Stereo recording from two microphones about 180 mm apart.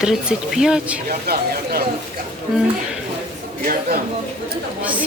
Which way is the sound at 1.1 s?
60° right (ahead or behind).